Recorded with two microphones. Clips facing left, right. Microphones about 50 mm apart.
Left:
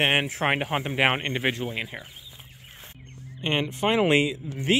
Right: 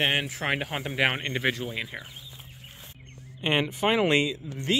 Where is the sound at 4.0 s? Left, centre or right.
Centre.